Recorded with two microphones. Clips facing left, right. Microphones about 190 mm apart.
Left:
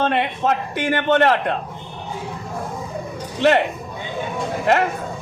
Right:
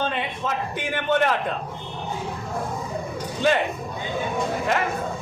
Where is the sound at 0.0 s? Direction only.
70° left (ahead or behind).